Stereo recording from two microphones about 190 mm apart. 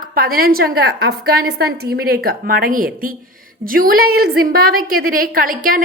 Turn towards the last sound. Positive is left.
turn(degrees=-45)  # may be behind; listen again after turning